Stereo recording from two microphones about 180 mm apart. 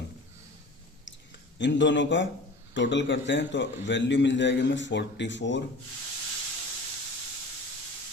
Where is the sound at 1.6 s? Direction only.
80° left.